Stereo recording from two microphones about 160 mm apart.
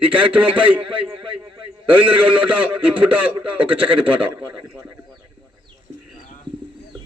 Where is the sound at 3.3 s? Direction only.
35° right (ahead or behind).